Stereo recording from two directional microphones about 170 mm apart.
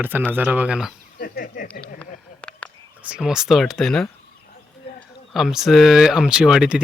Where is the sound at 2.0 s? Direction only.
5° left (ahead or behind).